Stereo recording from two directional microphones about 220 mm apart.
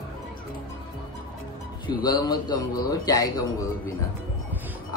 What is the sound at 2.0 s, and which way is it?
A man's voice, 20° left (ahead or behind).